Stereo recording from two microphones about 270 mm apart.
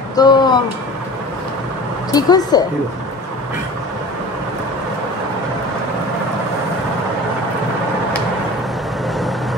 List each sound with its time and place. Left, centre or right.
0.1 s speech: centre
2.1 s speech: centre